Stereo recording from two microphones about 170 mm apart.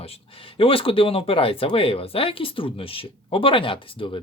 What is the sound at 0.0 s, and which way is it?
Speech, 35° left (ahead or behind).